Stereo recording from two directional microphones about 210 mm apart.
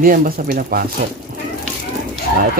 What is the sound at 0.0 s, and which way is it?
Speech, 40° right (ahead or behind).